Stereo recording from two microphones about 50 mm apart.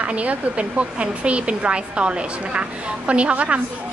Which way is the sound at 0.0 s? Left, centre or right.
Right.